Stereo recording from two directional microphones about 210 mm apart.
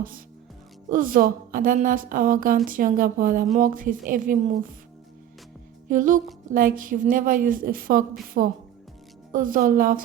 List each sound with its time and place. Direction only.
0.9 s a woman's voice: 40° right (ahead or behind)
5.9 s a woman's voice: 40° right (ahead or behind)